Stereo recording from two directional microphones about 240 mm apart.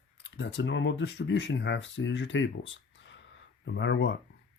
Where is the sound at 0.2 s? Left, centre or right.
Left.